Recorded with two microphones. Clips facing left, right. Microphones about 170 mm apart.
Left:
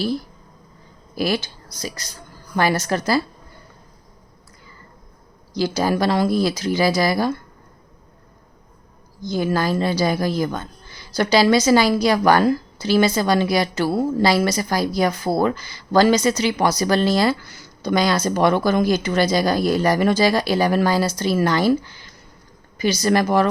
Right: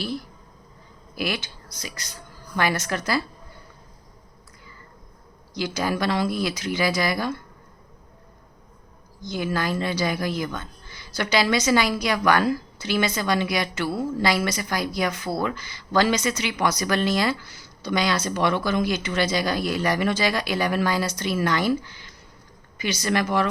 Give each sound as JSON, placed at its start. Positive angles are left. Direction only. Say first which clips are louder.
{"t": 1.1, "sound": "a woman's voice", "louder": "left 6 dB", "side_deg": 35}
{"t": 5.5, "sound": "a woman's voice", "louder": "left 6 dB", "side_deg": 35}
{"t": 9.2, "sound": "a woman's voice", "louder": "left 5 dB", "side_deg": 35}